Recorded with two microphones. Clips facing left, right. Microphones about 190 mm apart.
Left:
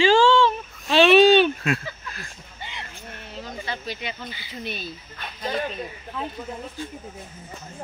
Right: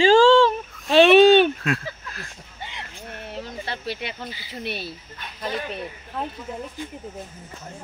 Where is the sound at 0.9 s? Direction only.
55° right (ahead or behind).